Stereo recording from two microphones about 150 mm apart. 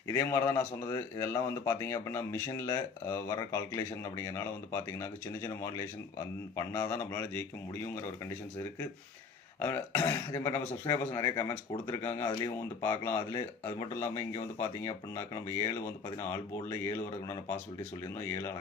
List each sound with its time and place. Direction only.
0.1 s speech: 20° left (ahead or behind)
9.6 s speech: 15° left (ahead or behind)